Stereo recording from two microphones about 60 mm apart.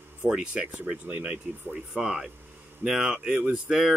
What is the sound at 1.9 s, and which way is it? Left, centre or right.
Speech, centre.